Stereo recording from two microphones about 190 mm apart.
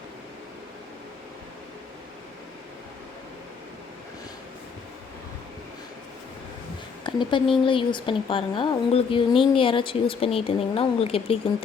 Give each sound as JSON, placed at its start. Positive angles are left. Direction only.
{"t": 7.0, "sound": "speech", "side_deg": 25}